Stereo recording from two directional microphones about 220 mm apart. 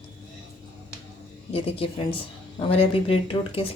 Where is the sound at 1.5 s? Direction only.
25° left (ahead or behind).